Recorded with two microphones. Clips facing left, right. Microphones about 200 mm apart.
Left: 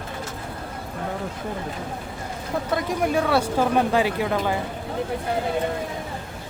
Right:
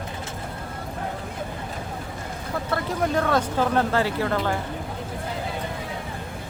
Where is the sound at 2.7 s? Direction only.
10° left (ahead or behind).